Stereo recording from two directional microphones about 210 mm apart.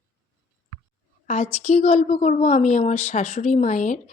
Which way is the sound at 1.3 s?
30° left (ahead or behind).